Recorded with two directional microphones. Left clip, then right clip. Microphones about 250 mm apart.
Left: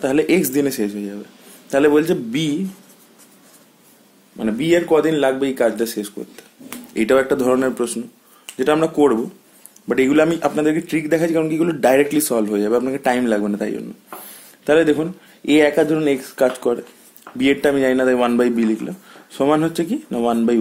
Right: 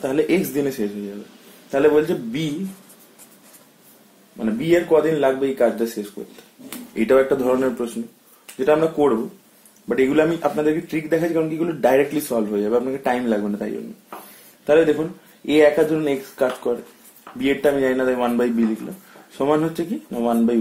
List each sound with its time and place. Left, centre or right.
0.0 s a man's voice: left
4.4 s a man's voice: left